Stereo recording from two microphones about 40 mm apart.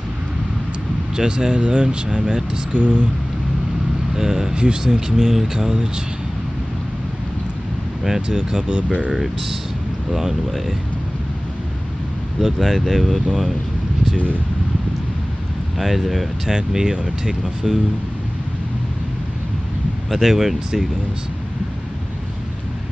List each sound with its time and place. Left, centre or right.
1.1 s speech: centre
4.1 s speech: centre
4.6 s speech: right
4.9 s speech: centre
8.0 s speech: centre; by 9.1 s right
9.1 s speech: centre
12.4 s speech: centre
15.8 s speech: centre
16.4 s speech: centre
20.1 s speech: centre
20.3 s speech: centre